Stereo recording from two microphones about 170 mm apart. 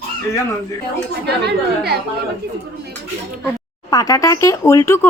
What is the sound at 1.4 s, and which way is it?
Speech, 70° right (ahead or behind).